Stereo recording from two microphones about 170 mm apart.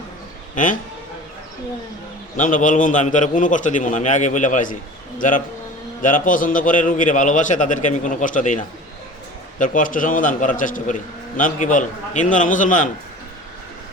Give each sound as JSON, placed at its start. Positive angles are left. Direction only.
{"t": 0.5, "sound": "a man's voice", "side_deg": 50}
{"t": 2.3, "sound": "a man's voice", "side_deg": 50}
{"t": 6.0, "sound": "a man's voice", "side_deg": 50}